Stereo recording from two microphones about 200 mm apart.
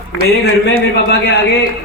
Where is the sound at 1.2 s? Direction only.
60° left (ahead or behind).